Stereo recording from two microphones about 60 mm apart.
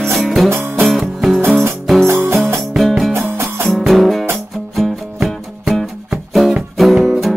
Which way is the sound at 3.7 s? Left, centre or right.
Centre.